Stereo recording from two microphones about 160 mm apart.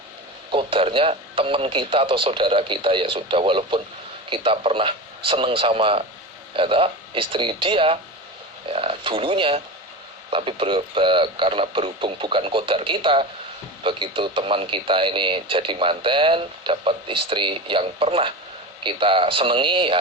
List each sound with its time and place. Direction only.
0.5 s speech: 35° right (ahead or behind)